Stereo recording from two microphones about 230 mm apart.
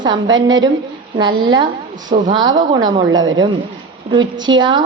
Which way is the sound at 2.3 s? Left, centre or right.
Centre.